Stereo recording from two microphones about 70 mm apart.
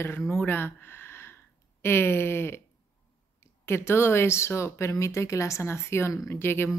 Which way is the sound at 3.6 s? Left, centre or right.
Left.